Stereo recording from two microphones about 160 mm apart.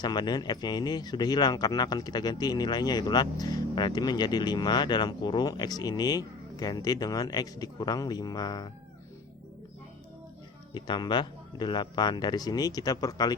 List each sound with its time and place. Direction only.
0.0 s speech: 25° left (ahead or behind)
10.8 s speech: 30° left (ahead or behind)